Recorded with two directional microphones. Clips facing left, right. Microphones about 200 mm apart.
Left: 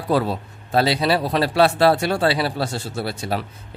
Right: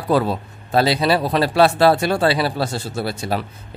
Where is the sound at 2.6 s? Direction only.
40° right (ahead or behind).